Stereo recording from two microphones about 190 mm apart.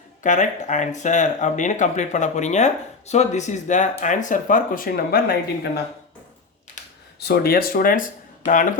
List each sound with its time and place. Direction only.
0.2 s speech: 40° left (ahead or behind)
7.2 s speech: 60° left (ahead or behind)